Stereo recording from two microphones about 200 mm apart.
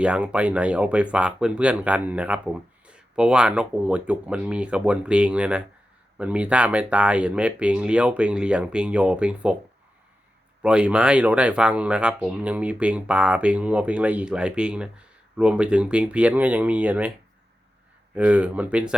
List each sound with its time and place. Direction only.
0.0 s speech: 5° right (ahead or behind)
10.6 s speech: 5° right (ahead or behind)
18.1 s speech: 10° right (ahead or behind)